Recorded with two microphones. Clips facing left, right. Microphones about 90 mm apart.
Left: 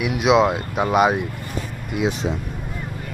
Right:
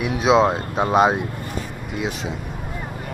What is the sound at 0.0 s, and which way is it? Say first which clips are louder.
Speech: even; 35° right (ahead or behind).